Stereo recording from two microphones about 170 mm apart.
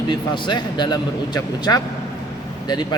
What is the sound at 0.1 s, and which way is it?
A man's voice, 25° left (ahead or behind).